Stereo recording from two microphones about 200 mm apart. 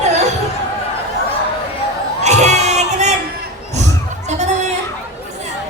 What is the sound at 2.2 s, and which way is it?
Crowd, 35° right (ahead or behind).